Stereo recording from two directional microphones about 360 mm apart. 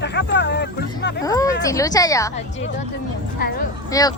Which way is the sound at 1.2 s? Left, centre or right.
Centre.